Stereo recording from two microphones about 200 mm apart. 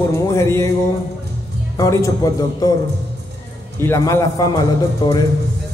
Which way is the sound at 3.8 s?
15° left (ahead or behind).